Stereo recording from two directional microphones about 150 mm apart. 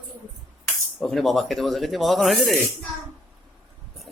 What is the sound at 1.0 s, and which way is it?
Speech, centre (ahead or behind).